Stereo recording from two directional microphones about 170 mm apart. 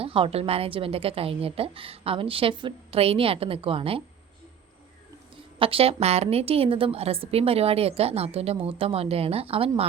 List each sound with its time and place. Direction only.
0.0 s a woman's voice: 35° right (ahead or behind)
5.5 s a woman's voice: 30° right (ahead or behind)